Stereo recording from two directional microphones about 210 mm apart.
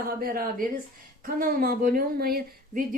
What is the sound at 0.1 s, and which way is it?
A woman's voice, 45° right (ahead or behind).